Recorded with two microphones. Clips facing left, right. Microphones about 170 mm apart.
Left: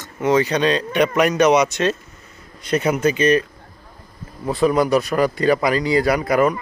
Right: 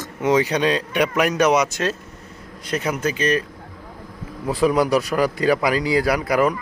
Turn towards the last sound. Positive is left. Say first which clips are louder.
# left 2 dB
turn(degrees=-5)  # may be behind; listen again after turning